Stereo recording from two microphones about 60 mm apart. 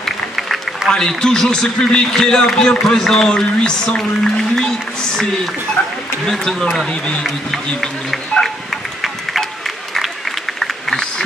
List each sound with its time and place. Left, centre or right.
0.0 s applause: centre
0.9 s a man's voice: centre
5.8 s speech: left
6.2 s a man's voice: centre
7.2 s speech: centre
9.0 s a sound: centre
10.6 s a sound: centre